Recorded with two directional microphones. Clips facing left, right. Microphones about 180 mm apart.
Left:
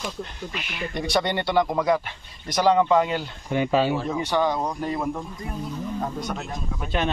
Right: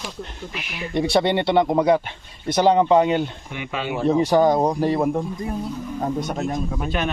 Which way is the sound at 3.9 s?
30° right (ahead or behind).